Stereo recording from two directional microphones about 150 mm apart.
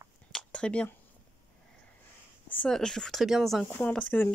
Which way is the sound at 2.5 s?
5° left (ahead or behind).